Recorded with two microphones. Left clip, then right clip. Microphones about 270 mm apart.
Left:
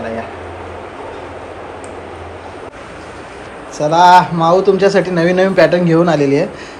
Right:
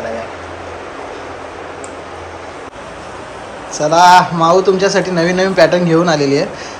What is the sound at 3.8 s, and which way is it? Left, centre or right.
A man's voice, centre.